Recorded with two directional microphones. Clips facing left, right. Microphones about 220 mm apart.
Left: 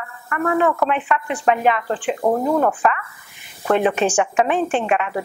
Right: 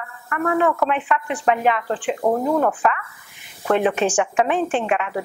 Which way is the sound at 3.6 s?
25° left (ahead or behind).